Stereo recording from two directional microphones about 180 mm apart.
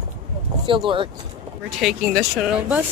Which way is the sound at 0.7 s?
30° right (ahead or behind).